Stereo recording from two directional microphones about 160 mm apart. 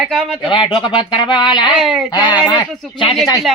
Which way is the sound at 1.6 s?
5° right (ahead or behind).